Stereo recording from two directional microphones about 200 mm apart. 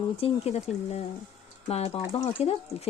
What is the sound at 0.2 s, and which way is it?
Speech, 30° left (ahead or behind).